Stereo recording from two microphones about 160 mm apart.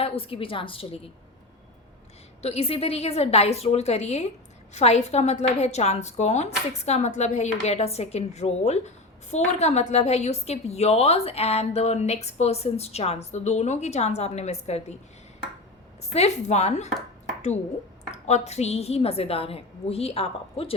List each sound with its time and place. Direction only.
0.0 s a woman's voice: 35° left (ahead or behind)
2.4 s a woman's voice: 40° left (ahead or behind)
16.1 s a woman's voice: 45° left (ahead or behind)
18.3 s a woman's voice: 45° left (ahead or behind)